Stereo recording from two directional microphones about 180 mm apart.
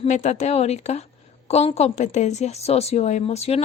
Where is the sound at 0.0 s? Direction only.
40° left (ahead or behind).